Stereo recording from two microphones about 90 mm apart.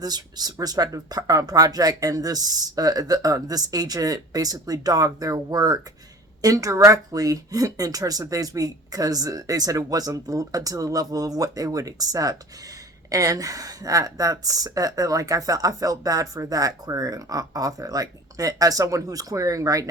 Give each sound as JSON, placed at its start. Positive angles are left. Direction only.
{"t": 0.0, "sound": "speech", "side_deg": -50}